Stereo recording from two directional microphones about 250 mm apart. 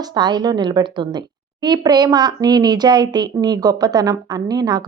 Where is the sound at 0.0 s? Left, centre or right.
Centre.